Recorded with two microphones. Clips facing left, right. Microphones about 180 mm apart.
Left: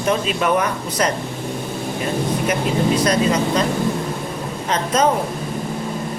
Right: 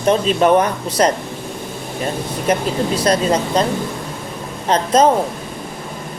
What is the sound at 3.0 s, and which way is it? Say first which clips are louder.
Speech: right 1 dB; 30° right (ahead or behind).